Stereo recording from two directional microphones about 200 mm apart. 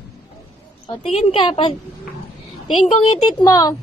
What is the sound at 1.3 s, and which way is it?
Speech, 25° left (ahead or behind).